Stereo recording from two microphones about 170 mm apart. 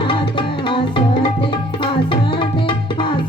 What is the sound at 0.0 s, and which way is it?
Tabla, 30° left (ahead or behind).